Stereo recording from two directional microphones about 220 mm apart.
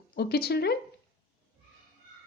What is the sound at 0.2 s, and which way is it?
Speech, 45° left (ahead or behind).